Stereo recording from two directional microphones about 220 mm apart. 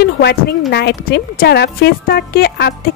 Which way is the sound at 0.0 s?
50° left (ahead or behind).